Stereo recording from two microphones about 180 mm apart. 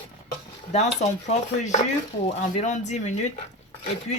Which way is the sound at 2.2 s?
40° left (ahead or behind).